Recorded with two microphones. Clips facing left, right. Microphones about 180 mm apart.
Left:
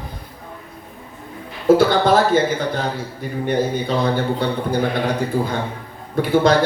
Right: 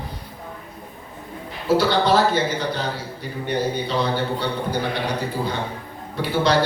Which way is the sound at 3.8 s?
50° left (ahead or behind).